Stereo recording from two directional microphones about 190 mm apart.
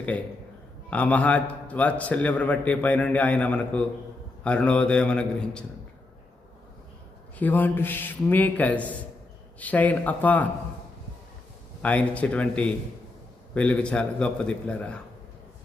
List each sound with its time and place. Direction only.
0.9 s a man's voice: 5° left (ahead or behind)
7.3 s a man's voice: 10° left (ahead or behind)
11.8 s a man's voice: 5° left (ahead or behind)